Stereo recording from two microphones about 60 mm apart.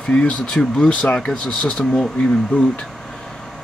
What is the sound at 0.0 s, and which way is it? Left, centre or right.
Speech, centre.